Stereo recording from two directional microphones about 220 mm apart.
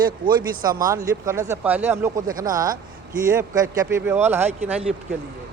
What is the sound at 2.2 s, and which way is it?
Speech, 40° right (ahead or behind).